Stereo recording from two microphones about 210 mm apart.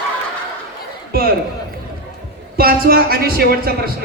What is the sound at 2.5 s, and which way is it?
A woman's voice, 45° right (ahead or behind).